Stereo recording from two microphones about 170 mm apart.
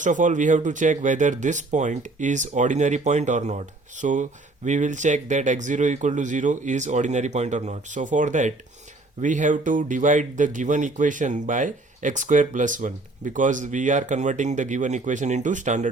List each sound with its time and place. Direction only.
0.0 s speech: 50° right (ahead or behind)